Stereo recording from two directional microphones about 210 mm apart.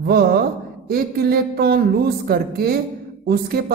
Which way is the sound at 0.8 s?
45° right (ahead or behind).